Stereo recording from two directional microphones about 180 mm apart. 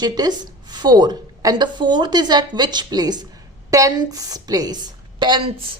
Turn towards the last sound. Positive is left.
turn(degrees=-25)  # may be behind; listen again after turning